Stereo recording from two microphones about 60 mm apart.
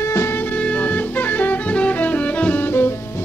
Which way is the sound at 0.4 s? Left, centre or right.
Left.